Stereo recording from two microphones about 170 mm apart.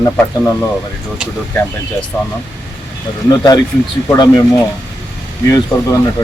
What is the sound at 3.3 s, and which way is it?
Speech, 25° left (ahead or behind).